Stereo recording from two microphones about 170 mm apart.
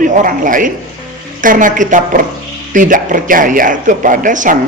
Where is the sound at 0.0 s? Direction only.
50° right (ahead or behind).